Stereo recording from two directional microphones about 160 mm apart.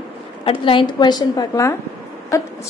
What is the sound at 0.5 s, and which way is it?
A woman's voice, 30° left (ahead or behind).